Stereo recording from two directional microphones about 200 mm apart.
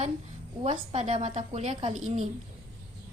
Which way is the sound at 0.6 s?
35° right (ahead or behind).